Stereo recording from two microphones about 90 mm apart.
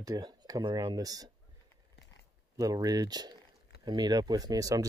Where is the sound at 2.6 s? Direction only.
40° right (ahead or behind).